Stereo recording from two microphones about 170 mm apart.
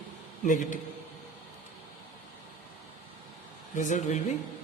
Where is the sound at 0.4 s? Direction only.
50° left (ahead or behind).